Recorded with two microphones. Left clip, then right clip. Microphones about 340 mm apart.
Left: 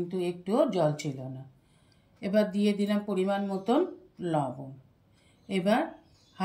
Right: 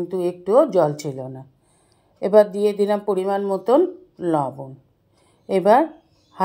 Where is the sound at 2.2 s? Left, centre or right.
Centre.